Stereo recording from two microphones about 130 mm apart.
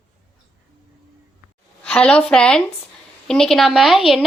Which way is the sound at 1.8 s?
10° left (ahead or behind).